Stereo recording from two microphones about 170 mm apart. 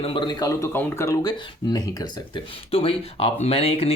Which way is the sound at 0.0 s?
30° left (ahead or behind).